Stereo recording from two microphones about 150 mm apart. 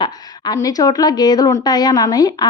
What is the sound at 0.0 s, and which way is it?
A woman's voice, 25° left (ahead or behind).